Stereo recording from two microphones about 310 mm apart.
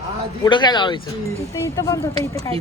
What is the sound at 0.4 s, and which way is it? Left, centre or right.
Speech, centre.